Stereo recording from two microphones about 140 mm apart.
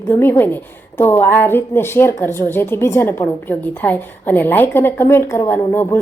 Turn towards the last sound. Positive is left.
turn(degrees=15)  # may be behind; listen again after turning